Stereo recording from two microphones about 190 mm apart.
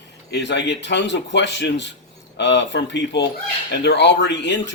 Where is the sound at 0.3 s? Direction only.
65° left (ahead or behind).